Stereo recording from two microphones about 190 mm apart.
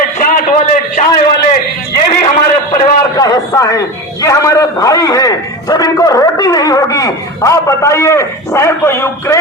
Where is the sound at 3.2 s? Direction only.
20° left (ahead or behind).